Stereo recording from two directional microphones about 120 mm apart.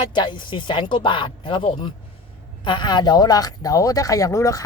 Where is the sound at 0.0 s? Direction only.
40° left (ahead or behind).